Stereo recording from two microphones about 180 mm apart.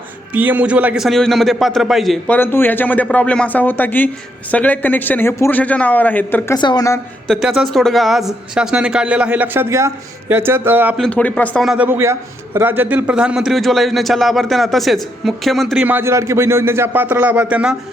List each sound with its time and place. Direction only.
0.3 s a man's voice: 10° right (ahead or behind); by 6.6 s 10° left (ahead or behind)
6.6 s a woman's voice: 25° left (ahead or behind)
7.3 s a man's voice: centre (ahead or behind)
10.9 s a man's voice: 5° left (ahead or behind)